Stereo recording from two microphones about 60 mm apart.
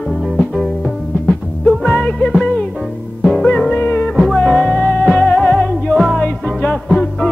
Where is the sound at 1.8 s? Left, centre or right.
Centre.